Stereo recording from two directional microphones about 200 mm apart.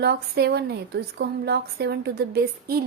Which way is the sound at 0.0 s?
55° right (ahead or behind).